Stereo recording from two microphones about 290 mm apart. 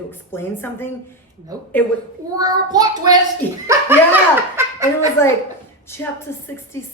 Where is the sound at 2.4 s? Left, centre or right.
Centre.